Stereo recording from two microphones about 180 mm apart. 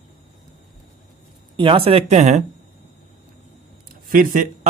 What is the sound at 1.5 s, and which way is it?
Speech, 30° right (ahead or behind).